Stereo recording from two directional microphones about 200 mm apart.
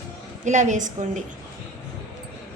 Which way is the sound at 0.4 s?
35° right (ahead or behind).